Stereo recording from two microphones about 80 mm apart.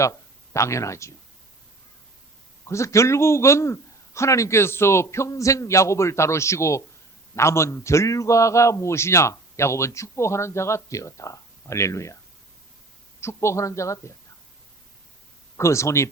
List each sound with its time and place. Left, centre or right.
0.0 s speech: left
2.6 s a man's voice: left
13.1 s a man's voice: left
15.5 s a man's voice: left